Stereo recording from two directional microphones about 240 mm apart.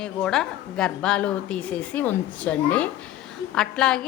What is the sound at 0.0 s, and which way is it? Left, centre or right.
A woman's voice, centre.